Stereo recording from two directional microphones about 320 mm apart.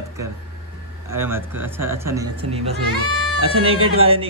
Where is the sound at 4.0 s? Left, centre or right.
Centre.